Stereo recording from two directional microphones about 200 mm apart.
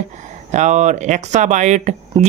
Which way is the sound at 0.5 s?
35° right (ahead or behind).